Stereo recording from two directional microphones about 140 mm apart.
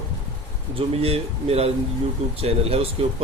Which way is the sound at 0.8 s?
45° right (ahead or behind).